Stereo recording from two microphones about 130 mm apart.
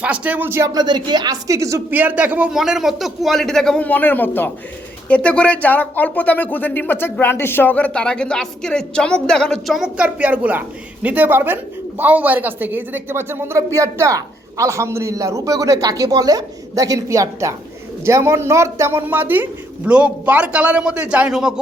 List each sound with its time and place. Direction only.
0.0 s speech: 10° right (ahead or behind)
0.7 s speech: 35° right (ahead or behind)
1.9 s a man's voice: 15° right (ahead or behind)